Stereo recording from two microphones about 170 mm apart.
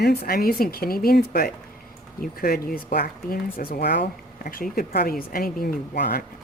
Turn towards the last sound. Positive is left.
turn(degrees=60)  # may be behind; listen again after turning